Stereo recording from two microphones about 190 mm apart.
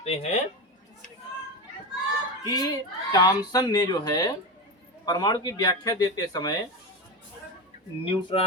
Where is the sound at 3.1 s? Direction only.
20° left (ahead or behind).